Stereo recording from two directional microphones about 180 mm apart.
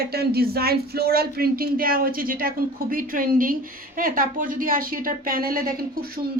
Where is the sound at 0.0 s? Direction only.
60° right (ahead or behind).